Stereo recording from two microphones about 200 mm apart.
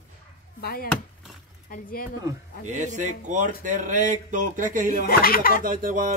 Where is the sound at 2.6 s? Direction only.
40° right (ahead or behind).